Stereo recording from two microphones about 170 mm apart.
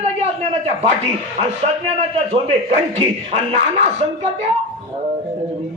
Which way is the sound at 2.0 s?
35° right (ahead or behind).